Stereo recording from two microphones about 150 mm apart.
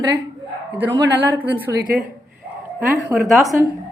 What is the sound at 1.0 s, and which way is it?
Speech, 10° right (ahead or behind).